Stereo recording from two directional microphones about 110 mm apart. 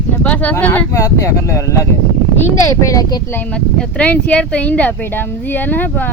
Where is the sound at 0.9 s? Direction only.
30° left (ahead or behind).